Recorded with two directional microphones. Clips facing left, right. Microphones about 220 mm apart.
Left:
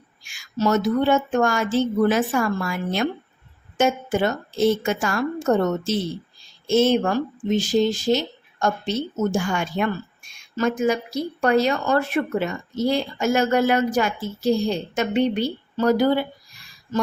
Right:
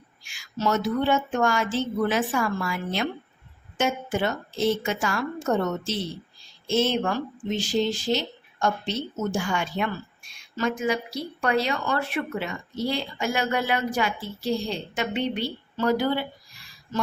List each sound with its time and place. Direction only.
0.3 s speech: 45° left (ahead or behind)